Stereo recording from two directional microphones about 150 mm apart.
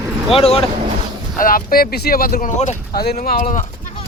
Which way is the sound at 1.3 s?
70° left (ahead or behind).